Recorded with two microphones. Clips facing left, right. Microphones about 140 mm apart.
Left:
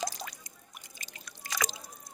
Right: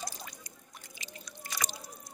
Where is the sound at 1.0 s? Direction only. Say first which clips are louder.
Left 1 dB; 85° left.